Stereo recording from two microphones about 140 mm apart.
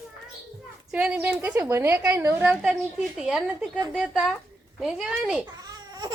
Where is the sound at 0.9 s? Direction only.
10° right (ahead or behind).